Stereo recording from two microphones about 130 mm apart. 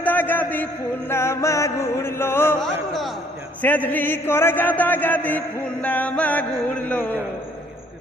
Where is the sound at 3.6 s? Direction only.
10° left (ahead or behind).